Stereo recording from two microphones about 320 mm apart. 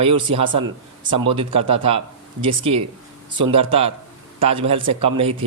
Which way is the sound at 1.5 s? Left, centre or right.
Right.